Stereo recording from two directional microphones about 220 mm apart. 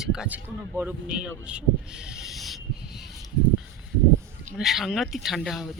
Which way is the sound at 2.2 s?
Centre (ahead or behind).